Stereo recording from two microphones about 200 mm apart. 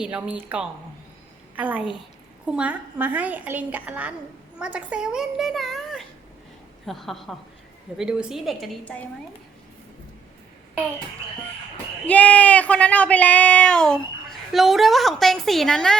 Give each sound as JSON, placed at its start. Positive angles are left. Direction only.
{"t": 0.0, "sound": "a child's voice", "side_deg": -5}
{"t": 12.0, "sound": "a child's voice", "side_deg": 5}